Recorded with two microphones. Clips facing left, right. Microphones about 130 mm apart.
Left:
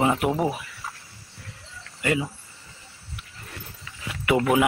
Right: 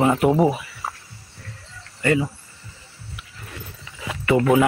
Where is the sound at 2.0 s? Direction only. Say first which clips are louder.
Right 5 dB; 10° left (ahead or behind).